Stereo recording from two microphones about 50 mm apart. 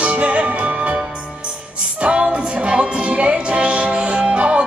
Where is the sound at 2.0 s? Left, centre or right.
Centre.